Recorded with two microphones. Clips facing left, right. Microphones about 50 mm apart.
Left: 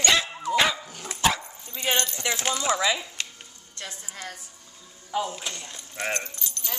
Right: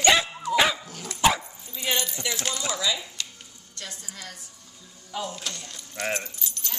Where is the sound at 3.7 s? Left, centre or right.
Left.